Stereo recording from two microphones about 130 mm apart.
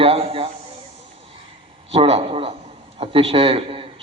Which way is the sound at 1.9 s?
50° right (ahead or behind).